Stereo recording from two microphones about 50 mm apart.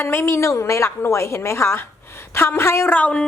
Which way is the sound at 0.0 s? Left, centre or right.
Left.